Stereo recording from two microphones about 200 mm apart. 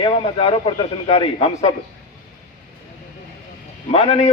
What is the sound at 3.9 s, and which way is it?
Speech, 30° left (ahead or behind).